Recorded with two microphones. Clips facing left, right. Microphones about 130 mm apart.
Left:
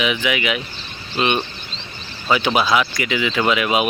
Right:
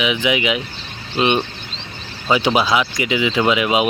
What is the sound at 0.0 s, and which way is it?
Speech, 20° right (ahead or behind).